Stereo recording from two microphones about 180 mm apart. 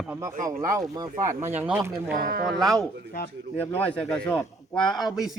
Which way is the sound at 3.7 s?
5° left (ahead or behind).